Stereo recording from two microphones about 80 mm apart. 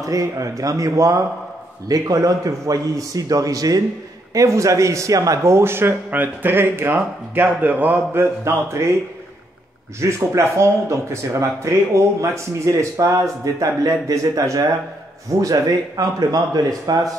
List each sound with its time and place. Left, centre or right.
0.0 s a man's voice: right
9.9 s a man's voice: right